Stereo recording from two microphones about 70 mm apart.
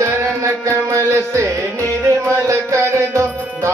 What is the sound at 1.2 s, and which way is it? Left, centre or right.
Carnatic music, right.